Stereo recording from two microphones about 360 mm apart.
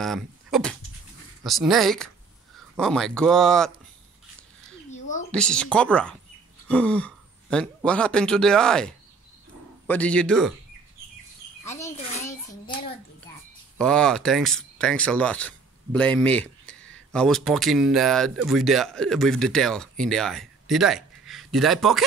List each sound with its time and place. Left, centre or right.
0.0 s speech: centre
5.3 s speech: centre
11.6 s speech: centre
12.3 s a sound: centre
13.7 s speech: centre